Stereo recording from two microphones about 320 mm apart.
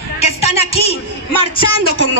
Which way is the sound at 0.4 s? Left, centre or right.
Centre.